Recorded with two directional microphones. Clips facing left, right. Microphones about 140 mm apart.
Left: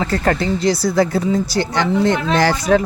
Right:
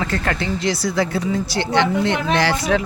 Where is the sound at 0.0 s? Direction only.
35° left (ahead or behind).